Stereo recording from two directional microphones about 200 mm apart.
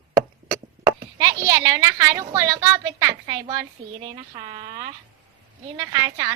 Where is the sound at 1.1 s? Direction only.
20° right (ahead or behind).